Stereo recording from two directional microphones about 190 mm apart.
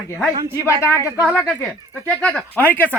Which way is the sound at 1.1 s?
10° right (ahead or behind).